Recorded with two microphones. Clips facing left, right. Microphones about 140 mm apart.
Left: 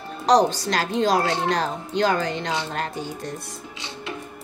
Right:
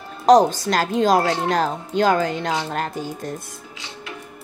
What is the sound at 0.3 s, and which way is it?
A woman's voice, 50° right (ahead or behind).